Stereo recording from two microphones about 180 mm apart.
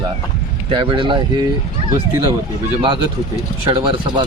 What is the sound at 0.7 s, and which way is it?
Speech, 25° right (ahead or behind).